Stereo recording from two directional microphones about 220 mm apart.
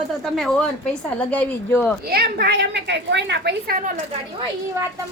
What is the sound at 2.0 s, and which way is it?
A woman's voice, 45° right (ahead or behind).